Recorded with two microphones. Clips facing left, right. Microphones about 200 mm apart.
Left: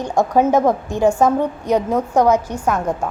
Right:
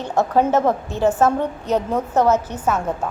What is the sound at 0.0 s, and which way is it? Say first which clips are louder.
A woman's voice: left 2 dB; 10° left (ahead or behind).